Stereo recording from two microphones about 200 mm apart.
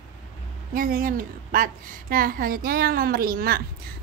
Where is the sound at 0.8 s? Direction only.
45° right (ahead or behind).